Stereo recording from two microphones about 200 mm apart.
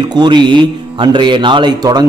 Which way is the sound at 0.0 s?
20° right (ahead or behind).